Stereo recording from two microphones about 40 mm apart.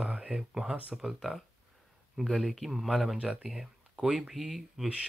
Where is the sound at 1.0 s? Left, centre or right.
Centre.